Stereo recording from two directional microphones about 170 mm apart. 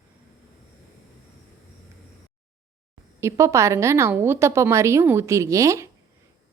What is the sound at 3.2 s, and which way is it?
A woman's voice, 15° right (ahead or behind).